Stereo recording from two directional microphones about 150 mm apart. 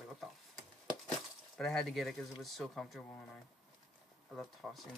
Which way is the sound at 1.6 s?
Centre (ahead or behind).